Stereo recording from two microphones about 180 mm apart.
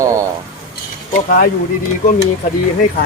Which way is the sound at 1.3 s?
55° left (ahead or behind).